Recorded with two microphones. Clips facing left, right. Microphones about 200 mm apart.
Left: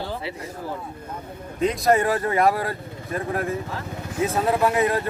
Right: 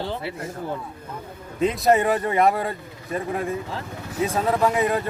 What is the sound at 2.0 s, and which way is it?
Speech, 20° right (ahead or behind).